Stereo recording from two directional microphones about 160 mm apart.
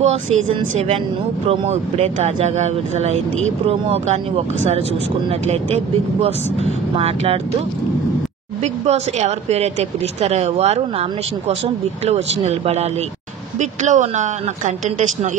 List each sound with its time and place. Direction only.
0.0 s speech: 40° right (ahead or behind)
8.8 s speech: 45° right (ahead or behind)